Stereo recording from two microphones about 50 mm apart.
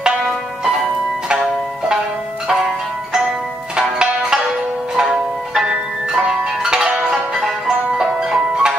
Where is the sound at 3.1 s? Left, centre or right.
Centre.